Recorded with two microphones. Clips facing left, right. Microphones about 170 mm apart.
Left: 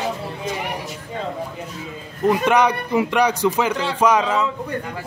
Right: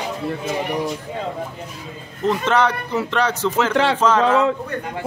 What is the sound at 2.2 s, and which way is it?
A man's voice, 15° left (ahead or behind).